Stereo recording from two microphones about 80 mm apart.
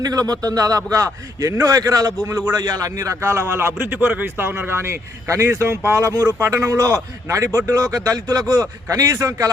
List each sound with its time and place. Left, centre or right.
0.0 s a man's voice: right
2.2 s a man's voice: right
2.6 s a man's voice: right
3.8 s a man's voice: right